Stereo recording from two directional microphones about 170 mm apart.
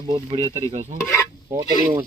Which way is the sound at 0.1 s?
35° right (ahead or behind).